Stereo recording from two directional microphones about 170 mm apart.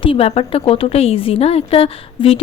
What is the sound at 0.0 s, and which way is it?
A woman's voice, 35° left (ahead or behind).